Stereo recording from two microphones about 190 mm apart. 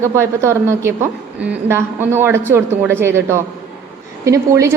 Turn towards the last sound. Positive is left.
turn(degrees=-15)  # may be behind; listen again after turning